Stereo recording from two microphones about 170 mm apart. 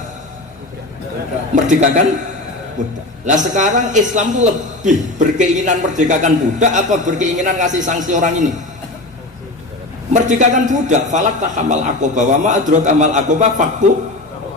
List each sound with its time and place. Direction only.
1.5 s a man's voice: 45° right (ahead or behind)
10.1 s a man's voice: 45° right (ahead or behind)